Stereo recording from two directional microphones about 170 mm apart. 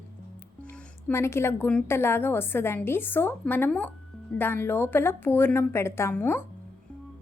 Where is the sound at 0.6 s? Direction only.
10° left (ahead or behind).